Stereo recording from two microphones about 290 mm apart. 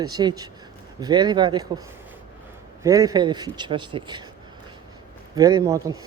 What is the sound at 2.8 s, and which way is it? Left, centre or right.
Speech, centre.